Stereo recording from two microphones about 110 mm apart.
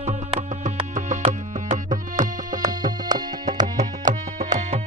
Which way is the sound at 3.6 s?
90° right.